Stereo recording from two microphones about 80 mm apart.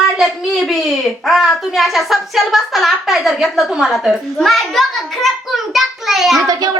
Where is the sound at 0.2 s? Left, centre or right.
Centre.